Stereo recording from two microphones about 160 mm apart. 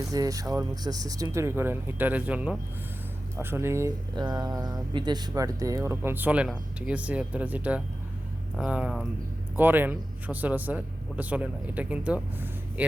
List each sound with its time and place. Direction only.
0.0 s a man's voice: 20° right (ahead or behind)